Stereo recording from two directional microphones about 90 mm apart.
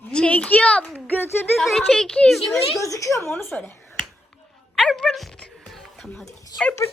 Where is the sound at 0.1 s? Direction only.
15° left (ahead or behind).